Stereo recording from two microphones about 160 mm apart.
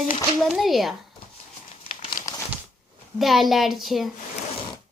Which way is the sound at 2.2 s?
55° left (ahead or behind).